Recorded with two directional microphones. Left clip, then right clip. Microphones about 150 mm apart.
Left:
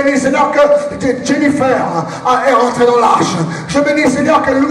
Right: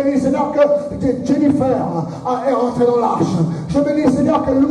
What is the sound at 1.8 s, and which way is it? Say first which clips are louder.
Music: left 6 dB; 40° left (ahead or behind).